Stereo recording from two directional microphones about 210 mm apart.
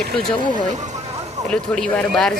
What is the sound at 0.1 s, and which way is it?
Speech, centre (ahead or behind).